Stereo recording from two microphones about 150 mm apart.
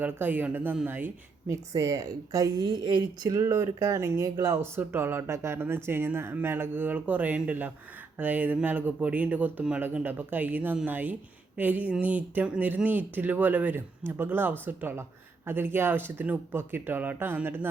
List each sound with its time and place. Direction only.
0.0 s a woman's voice: 10° right (ahead or behind)